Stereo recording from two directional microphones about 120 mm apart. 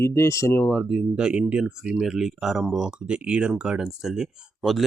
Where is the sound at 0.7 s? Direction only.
Centre (ahead or behind).